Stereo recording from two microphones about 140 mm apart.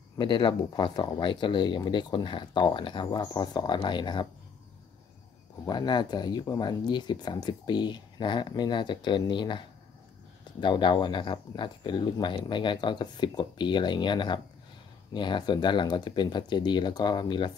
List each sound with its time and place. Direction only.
0.2 s speech: 35° left (ahead or behind)
5.7 s speech: 30° left (ahead or behind)